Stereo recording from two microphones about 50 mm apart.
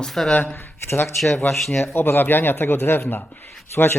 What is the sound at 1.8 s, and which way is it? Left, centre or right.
Speech, left.